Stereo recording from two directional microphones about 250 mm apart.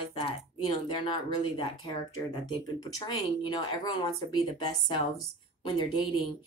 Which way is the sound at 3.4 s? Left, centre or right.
Centre.